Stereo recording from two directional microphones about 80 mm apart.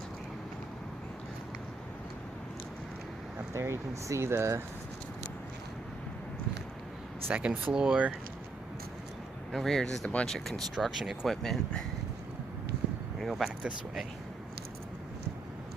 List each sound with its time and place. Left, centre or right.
3.5 s speech: right
7.3 s speech: centre
9.5 s speech: centre
10.8 s speech: centre
13.1 s speech: centre